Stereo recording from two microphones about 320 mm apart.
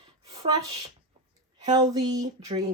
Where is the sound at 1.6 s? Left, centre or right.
Centre.